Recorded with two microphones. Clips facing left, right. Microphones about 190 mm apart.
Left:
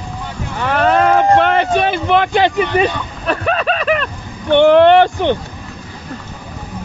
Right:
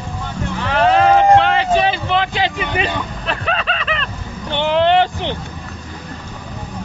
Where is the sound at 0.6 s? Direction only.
50° left (ahead or behind).